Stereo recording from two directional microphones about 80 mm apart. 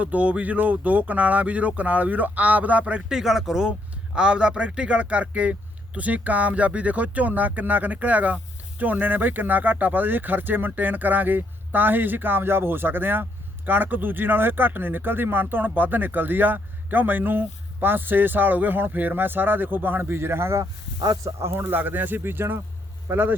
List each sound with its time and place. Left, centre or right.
0.0 s speech: centre